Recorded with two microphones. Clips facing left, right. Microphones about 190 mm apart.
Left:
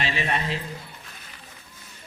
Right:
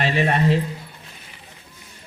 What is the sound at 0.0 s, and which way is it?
Speech, 50° right (ahead or behind).